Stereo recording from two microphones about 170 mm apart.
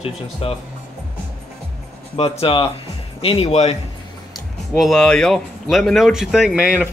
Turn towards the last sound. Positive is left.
turn(degrees=-5)  # may be behind; listen again after turning